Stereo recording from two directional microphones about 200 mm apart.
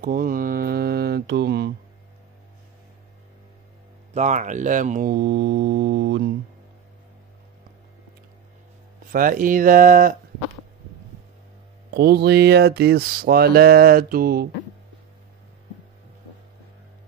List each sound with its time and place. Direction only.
0.0 s mantra: 45° right (ahead or behind)
4.1 s speech: 35° right (ahead or behind); by 6.3 s 60° right (ahead or behind)
9.1 s speech: 45° right (ahead or behind)
11.9 s speech: 55° right (ahead or behind)